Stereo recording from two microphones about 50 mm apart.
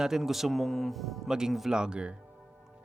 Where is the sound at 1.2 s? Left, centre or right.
Centre.